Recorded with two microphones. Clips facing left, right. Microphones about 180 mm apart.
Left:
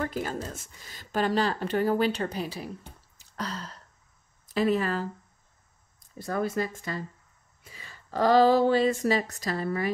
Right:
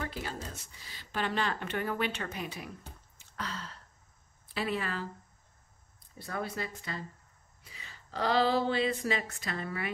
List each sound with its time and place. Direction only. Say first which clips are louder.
0.0 s speech: left 7 dB; 45° left (ahead or behind)
3.2 s a sound: left 5 dB; 40° left (ahead or behind)
4.5 s speech: left 9 dB; 40° left (ahead or behind)
6.1 s speech: left 8 dB; 45° left (ahead or behind)